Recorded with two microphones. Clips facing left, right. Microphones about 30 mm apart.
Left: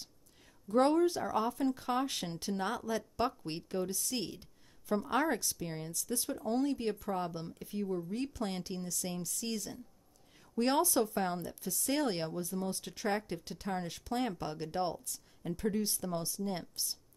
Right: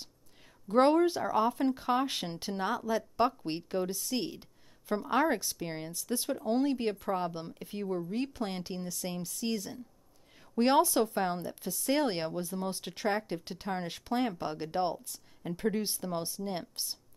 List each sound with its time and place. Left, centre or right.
0.7 s a woman's voice: right
2.6 s a woman's voice: centre; by 8.1 s right
8.1 s a woman's voice: right
8.5 s a woman's voice: centre
11.7 s speech: centre
12.6 s a woman's voice: right
14.1 s speech: centre
15.5 s a woman's voice: right